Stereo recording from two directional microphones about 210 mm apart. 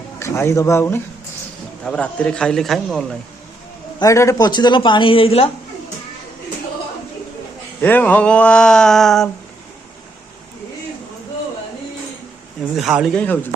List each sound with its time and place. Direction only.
0.2 s speech: 15° left (ahead or behind)
4.0 s speech: 15° left (ahead or behind)
7.8 s speech: 10° left (ahead or behind)
12.7 s speech: centre (ahead or behind)